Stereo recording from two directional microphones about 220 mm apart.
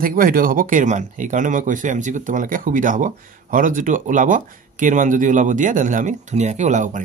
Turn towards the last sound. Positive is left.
turn(degrees=-35)  # may be behind; listen again after turning